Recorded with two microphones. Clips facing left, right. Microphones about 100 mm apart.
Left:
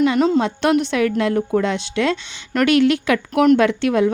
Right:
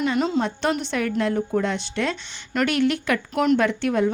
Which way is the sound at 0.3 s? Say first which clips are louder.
Left 6 dB; 70° left (ahead or behind).